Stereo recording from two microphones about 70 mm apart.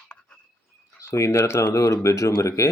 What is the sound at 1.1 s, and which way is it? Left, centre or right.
Speech, left.